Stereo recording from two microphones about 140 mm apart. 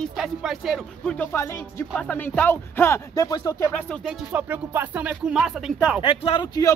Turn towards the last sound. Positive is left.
turn(degrees=30)  # may be behind; listen again after turning